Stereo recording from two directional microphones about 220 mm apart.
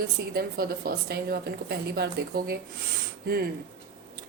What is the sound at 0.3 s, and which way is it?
A woman's voice, 45° right (ahead or behind).